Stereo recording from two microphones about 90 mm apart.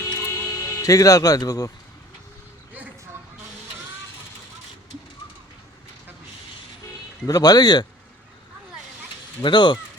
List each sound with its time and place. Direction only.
0.0 s music: 30° left (ahead or behind)
7.3 s speech: 45° left (ahead or behind)
9.4 s speech: 55° left (ahead or behind)